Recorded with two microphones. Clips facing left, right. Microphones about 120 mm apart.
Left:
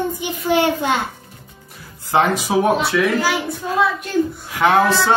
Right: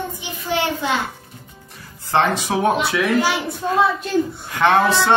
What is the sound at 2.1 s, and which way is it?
Speech, 10° left (ahead or behind).